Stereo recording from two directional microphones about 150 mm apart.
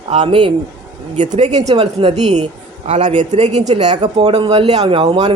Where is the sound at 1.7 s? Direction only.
35° right (ahead or behind).